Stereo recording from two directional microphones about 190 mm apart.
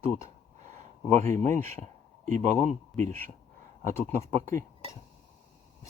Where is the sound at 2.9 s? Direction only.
35° right (ahead or behind).